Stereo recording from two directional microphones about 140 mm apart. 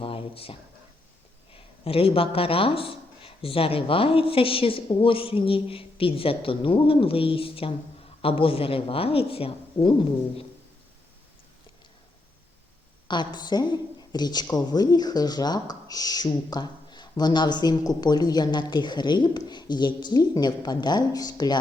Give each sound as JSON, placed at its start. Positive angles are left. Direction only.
{"t": 0.0, "sound": "a sound", "side_deg": 40}
{"t": 1.5, "sound": "speech", "side_deg": 40}
{"t": 13.1, "sound": "a woman's voice", "side_deg": 30}